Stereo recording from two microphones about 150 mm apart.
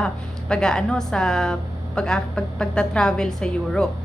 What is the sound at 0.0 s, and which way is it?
A woman's voice, 5° left (ahead or behind).